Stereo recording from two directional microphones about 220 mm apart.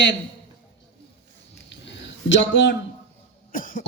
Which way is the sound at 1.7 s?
55° left (ahead or behind).